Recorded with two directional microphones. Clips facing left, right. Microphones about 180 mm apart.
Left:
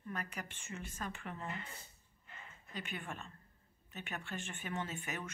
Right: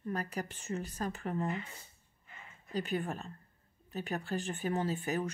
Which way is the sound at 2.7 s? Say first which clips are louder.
Right 10 dB; 35° right (ahead or behind).